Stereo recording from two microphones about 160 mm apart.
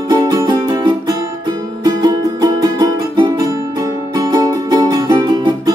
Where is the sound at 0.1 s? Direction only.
25° right (ahead or behind).